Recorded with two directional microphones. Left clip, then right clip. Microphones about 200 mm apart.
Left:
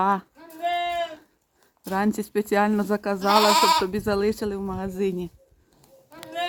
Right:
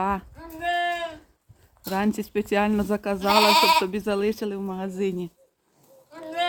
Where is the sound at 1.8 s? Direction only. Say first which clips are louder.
Left 1 dB; centre (ahead or behind).